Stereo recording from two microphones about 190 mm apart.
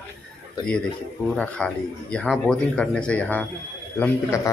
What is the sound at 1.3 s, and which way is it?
A man's voice, 5° left (ahead or behind).